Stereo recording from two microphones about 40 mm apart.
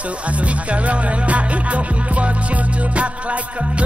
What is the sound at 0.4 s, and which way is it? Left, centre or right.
Music, right.